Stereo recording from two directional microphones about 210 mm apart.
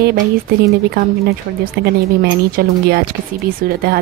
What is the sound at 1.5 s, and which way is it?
Speech, 50° right (ahead or behind).